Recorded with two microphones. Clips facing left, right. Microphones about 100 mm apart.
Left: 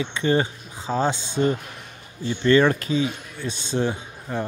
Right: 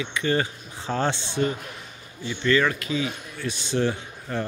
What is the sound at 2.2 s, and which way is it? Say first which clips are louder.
Speech: left 5 dB; 35° left (ahead or behind).